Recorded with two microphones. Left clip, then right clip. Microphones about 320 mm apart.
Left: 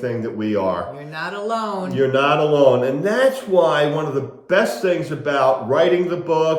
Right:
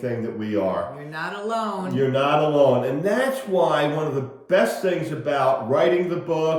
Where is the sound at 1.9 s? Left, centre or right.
Left.